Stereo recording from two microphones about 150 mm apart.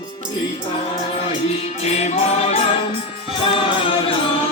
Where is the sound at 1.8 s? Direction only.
50° left (ahead or behind).